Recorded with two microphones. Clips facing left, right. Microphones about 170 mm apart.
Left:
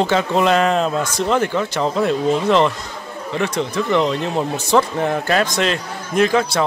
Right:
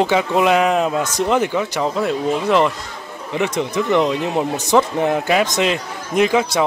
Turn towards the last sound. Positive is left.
turn(degrees=-15)  # may be behind; listen again after turning